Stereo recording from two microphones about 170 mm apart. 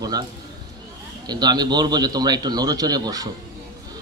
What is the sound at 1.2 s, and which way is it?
A man's voice, 25° right (ahead or behind).